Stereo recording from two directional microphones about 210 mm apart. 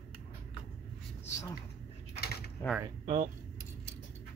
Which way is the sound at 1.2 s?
15° left (ahead or behind).